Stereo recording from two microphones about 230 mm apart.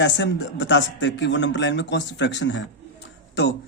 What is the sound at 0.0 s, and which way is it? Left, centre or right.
Speech, left.